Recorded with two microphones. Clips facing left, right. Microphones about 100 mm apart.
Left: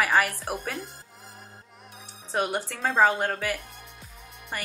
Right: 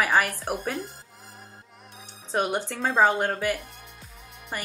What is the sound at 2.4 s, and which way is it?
Speech, 25° right (ahead or behind).